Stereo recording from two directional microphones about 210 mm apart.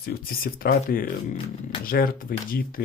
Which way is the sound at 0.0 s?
45° left (ahead or behind).